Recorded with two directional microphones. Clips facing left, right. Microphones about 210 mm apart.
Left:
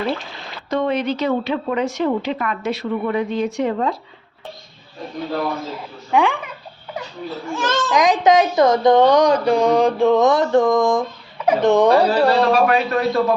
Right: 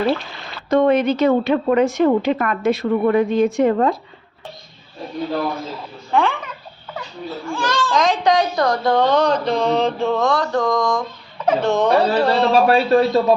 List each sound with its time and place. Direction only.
0.7 s a woman's voice: 50° right (ahead or behind)
6.1 s speech: 15° left (ahead or behind)
7.4 s speech: 20° left (ahead or behind)
12.4 s a man's voice: 25° right (ahead or behind)